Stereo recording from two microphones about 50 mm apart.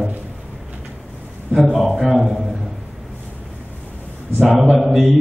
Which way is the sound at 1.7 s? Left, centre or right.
Centre.